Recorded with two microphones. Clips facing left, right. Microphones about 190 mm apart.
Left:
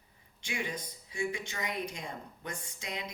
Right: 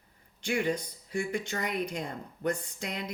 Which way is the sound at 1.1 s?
60° right (ahead or behind).